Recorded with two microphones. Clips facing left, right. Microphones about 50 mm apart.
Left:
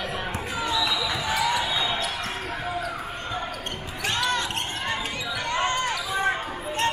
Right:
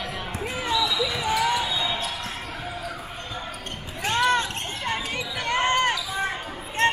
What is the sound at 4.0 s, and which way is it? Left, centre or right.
Basketball bounce, right.